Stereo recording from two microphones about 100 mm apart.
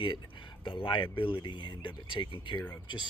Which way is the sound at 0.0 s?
55° left (ahead or behind).